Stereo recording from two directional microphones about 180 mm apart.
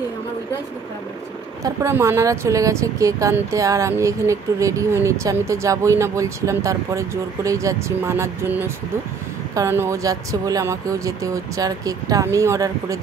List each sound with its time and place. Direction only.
1.6 s speech: 15° right (ahead or behind)